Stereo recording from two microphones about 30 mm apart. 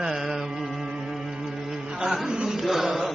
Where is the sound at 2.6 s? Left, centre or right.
Centre.